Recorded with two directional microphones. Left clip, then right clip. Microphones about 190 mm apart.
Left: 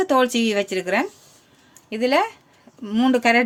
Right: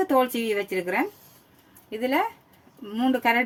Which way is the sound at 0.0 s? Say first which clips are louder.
Left 4 dB; 45° left (ahead or behind).